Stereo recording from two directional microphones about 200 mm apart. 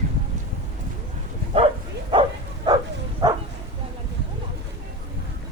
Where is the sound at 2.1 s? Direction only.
25° right (ahead or behind).